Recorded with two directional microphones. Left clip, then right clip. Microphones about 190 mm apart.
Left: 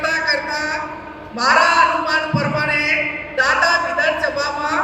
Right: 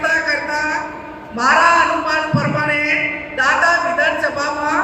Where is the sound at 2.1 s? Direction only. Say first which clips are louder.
Right 1 dB; 45° left (ahead or behind).